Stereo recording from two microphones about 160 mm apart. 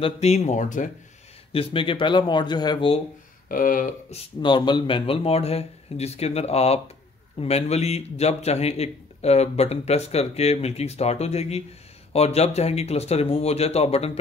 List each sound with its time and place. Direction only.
0.0 s speech: 40° left (ahead or behind)
1.5 s a man's voice: 35° left (ahead or behind)
3.4 s speech: 60° left (ahead or behind)
4.1 s a man's voice: 30° left (ahead or behind)